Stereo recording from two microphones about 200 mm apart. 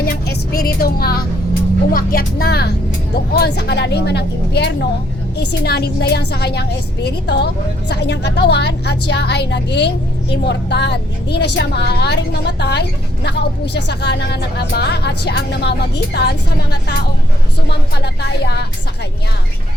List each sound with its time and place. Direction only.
0.0 s a woman's voice: 50° left (ahead or behind)
17.9 s a woman's voice: 55° left (ahead or behind)